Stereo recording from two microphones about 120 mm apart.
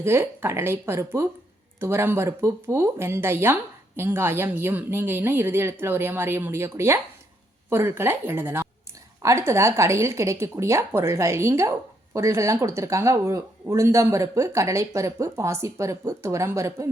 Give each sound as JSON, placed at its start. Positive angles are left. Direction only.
{"t": 0.0, "sound": "speech", "side_deg": -20}